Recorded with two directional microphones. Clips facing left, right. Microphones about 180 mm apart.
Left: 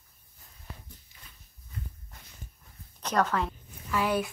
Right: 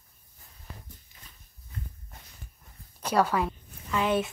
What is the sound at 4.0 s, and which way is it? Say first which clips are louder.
Speech: right 2 dB; 25° right (ahead or behind).